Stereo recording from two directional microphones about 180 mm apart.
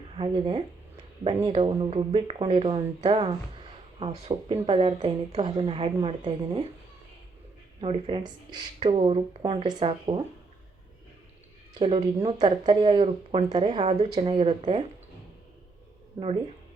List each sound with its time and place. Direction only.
0.1 s speech: 30° right (ahead or behind)
7.8 s speech: 30° right (ahead or behind)
8.9 s speech: 35° right (ahead or behind)
11.8 s speech: 30° right (ahead or behind)
13.8 s speech: 35° right (ahead or behind)